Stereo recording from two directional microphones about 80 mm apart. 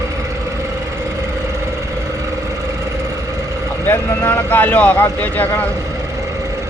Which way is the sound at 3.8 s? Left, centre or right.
Left.